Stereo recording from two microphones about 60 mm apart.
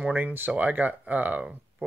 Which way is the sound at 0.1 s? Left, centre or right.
Right.